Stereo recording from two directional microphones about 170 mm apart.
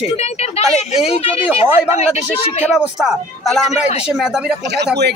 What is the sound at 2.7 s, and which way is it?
Speech, 5° right (ahead or behind).